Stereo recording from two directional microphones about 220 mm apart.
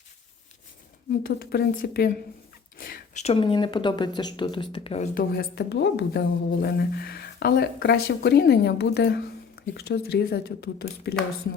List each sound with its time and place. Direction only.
1.2 s a woman's voice: 45° left (ahead or behind); by 5.0 s 25° left (ahead or behind)
5.1 s a woman's voice: 45° left (ahead or behind)